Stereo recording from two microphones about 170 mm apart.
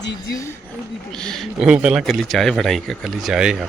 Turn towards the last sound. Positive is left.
turn(degrees=-5)  # may be behind; listen again after turning